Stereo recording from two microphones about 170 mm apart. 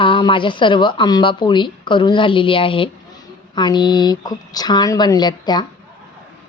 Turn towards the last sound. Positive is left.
turn(degrees=25)  # may be behind; listen again after turning